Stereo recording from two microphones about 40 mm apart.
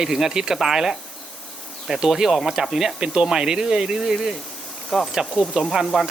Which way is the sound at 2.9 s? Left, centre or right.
Right.